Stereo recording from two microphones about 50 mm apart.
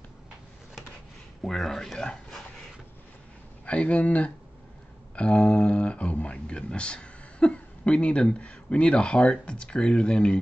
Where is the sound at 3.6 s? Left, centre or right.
Left.